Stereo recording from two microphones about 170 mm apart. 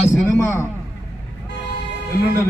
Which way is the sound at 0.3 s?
15° left (ahead or behind).